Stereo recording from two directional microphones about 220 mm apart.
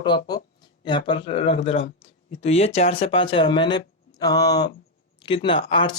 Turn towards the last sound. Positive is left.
turn(degrees=20)  # may be behind; listen again after turning